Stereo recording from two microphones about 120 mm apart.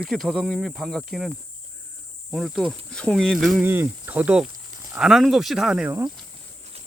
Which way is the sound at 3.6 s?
20° right (ahead or behind).